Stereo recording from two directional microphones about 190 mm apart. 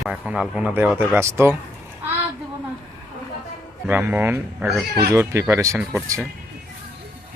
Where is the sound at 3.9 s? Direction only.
10° right (ahead or behind).